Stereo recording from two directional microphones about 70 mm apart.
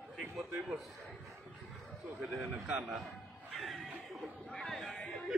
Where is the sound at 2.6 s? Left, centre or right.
Centre.